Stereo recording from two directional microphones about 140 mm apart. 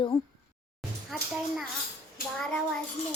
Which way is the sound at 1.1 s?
Centre (ahead or behind).